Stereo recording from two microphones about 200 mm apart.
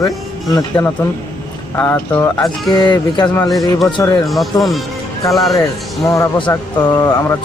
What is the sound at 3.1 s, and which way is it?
Speech, 15° left (ahead or behind).